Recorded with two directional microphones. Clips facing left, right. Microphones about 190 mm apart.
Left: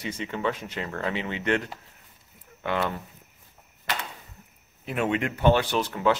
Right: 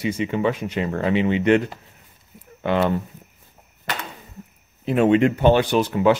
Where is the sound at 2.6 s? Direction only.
25° right (ahead or behind).